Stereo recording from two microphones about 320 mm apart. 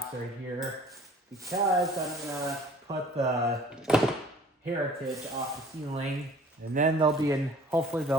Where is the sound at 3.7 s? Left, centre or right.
Centre.